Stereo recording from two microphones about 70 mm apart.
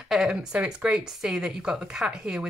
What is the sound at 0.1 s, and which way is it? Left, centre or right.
A woman's voice, centre.